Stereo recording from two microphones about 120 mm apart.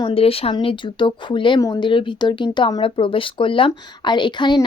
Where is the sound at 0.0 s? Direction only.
50° left (ahead or behind).